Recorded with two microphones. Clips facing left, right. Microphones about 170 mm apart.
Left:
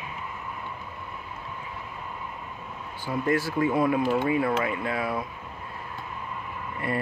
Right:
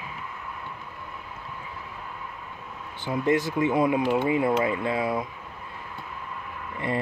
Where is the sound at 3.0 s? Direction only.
20° right (ahead or behind).